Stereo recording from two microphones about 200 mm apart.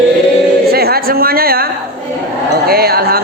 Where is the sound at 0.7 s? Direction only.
50° right (ahead or behind).